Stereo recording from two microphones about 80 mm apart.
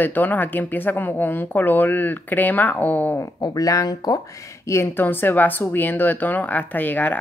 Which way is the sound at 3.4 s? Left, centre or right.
Left.